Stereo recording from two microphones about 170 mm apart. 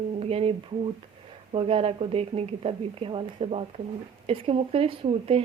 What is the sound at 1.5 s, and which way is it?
A woman's voice, 35° right (ahead or behind).